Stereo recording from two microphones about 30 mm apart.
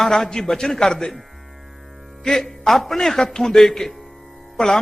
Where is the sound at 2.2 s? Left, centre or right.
Centre.